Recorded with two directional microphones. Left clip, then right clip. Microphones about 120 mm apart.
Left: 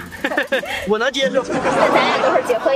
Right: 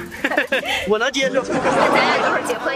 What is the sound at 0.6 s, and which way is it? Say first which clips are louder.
Speech: right 2 dB; 35° right (ahead or behind).